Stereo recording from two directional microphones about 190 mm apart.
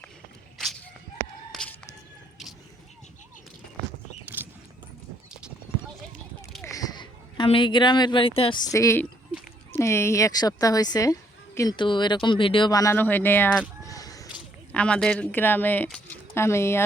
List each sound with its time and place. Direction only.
0.6 s shuffle: 5° left (ahead or behind)
1.5 s chicken: centre (ahead or behind)
4.3 s a sound: 10° right (ahead or behind)
6.7 s a woman's voice: 20° left (ahead or behind)
13.8 s a sound: 20° left (ahead or behind)
14.7 s speech: 5° left (ahead or behind)